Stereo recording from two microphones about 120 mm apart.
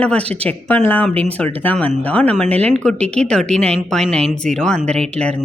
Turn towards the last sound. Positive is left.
turn(degrees=10)  # may be behind; listen again after turning